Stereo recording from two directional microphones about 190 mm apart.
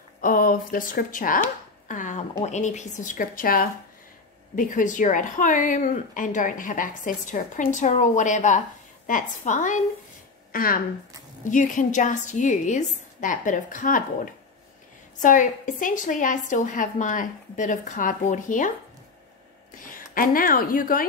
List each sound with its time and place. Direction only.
0.2 s a woman's voice: 45° left (ahead or behind)
19.7 s a woman's voice: 45° left (ahead or behind)